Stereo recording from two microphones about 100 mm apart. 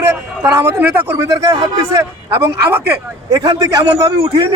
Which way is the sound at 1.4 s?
35° right (ahead or behind).